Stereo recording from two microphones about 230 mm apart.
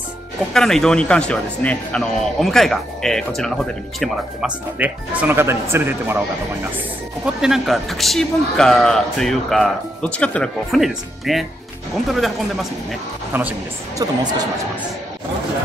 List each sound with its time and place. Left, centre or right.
0.5 s speech: centre
7.2 s speech: centre
13.3 s speech: centre